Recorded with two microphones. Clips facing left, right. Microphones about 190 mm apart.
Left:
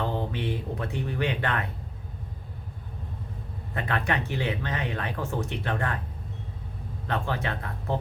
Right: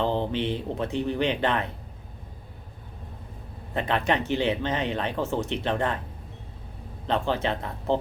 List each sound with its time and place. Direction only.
0.0 s speech: 25° right (ahead or behind)
3.8 s speech: 20° right (ahead or behind)
7.1 s speech: 20° right (ahead or behind)